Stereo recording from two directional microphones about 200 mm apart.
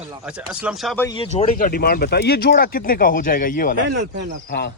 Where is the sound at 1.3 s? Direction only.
35° left (ahead or behind).